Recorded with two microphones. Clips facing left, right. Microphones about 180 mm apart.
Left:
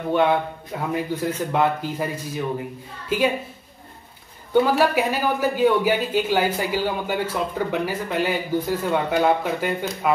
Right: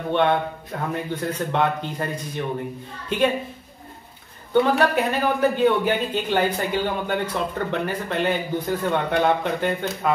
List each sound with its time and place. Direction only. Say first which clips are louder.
0.1 s a man's voice: left 1 dB; 5° left (ahead or behind)
4.6 s speech: even; 5° left (ahead or behind)